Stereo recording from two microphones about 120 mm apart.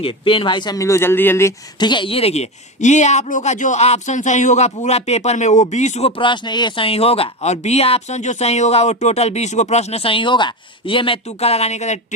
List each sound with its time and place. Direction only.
0.0 s speech: 45° left (ahead or behind); by 1.5 s 20° left (ahead or behind)
1.8 s a woman's voice: 40° left (ahead or behind); by 6.1 s 75° left (ahead or behind)
6.1 s speech: 45° left (ahead or behind)
11.3 s speech: 60° left (ahead or behind)